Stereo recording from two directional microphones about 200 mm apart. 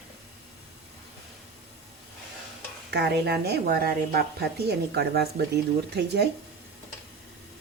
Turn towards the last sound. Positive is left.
turn(degrees=-55)  # may be behind; listen again after turning